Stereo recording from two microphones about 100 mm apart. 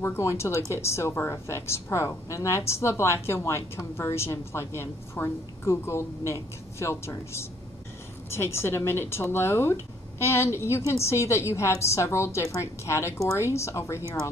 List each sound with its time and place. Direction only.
0.0 s a woman's voice: 25° left (ahead or behind)